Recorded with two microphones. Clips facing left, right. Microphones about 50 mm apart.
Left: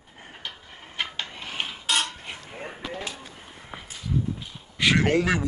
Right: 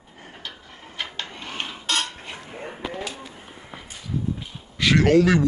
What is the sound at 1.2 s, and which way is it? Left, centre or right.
Filing, centre.